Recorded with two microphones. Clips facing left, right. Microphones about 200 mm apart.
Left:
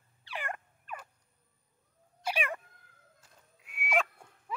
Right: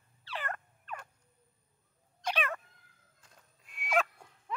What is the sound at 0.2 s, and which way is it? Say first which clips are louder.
Turkey: even; 10° left (ahead or behind).